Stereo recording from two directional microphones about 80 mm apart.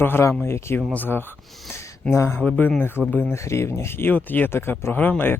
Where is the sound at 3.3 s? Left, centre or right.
Left.